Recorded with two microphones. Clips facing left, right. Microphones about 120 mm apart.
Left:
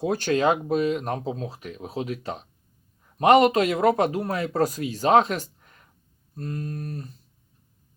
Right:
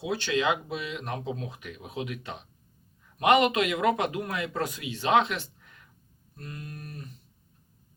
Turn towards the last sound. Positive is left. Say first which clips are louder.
# left 9 dB
turn(degrees=35)  # may be behind; listen again after turning